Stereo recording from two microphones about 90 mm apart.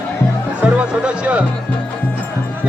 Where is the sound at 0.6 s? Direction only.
10° right (ahead or behind).